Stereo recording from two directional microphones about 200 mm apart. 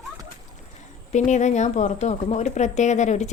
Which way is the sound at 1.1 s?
35° left (ahead or behind).